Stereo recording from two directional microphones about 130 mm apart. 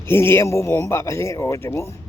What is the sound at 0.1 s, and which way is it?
A man's voice, 20° left (ahead or behind).